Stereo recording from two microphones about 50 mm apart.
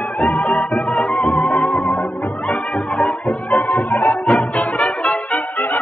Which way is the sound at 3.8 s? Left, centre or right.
Left.